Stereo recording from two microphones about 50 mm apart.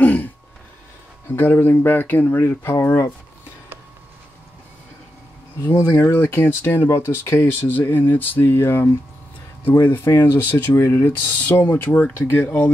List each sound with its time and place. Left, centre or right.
0.0 s a sound: left
1.3 s speech: left
5.9 s speech: left
6.9 s speech: left
7.5 s speech: left
10.8 s speech: left
11.2 s speech: left
11.5 s speech: left